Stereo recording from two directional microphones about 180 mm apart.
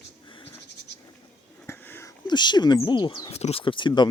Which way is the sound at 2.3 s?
25° left (ahead or behind).